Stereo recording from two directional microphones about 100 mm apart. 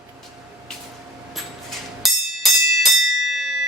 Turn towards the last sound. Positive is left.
turn(degrees=0)  # may be behind; listen again after turning